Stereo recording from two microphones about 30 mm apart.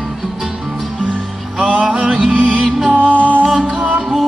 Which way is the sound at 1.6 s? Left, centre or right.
Right.